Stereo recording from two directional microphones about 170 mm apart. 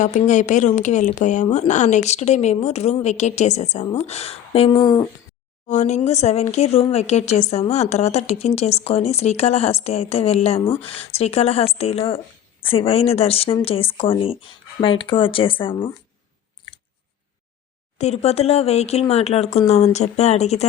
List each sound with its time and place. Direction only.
0.0 s speech: 45° left (ahead or behind); by 5.0 s 25° left (ahead or behind)
5.6 s speech: 45° left (ahead or behind)
17.9 s speech: 40° left (ahead or behind)